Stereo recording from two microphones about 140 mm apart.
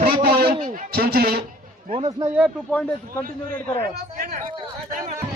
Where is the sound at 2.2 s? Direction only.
20° right (ahead or behind).